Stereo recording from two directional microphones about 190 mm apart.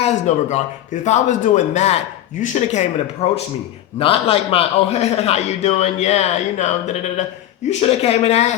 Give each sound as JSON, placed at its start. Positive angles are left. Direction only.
{"t": 0.0, "sound": "a man's voice", "side_deg": 35}
{"t": 3.9, "sound": "a man's voice", "side_deg": 30}